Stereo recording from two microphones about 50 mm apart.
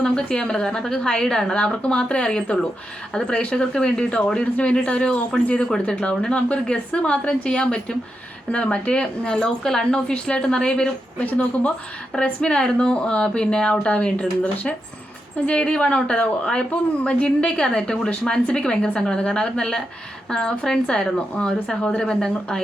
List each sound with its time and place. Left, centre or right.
0.0 s a woman's voice: centre
11.2 s a woman's voice: left